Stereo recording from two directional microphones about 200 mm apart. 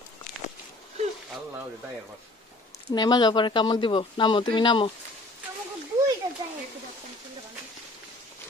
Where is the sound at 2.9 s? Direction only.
20° left (ahead or behind).